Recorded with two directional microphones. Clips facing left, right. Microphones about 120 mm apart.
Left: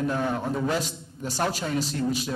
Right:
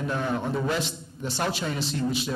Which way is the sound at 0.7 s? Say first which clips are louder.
Left 1 dB; 40° left (ahead or behind).